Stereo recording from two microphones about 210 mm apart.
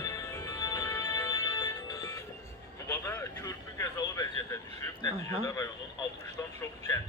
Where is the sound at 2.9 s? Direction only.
15° left (ahead or behind).